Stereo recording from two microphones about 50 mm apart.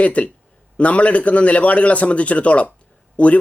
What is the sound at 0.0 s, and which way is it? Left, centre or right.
Speech, left.